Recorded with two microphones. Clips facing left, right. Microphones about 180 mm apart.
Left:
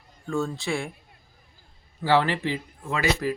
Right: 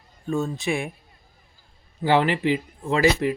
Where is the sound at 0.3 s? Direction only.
20° right (ahead or behind).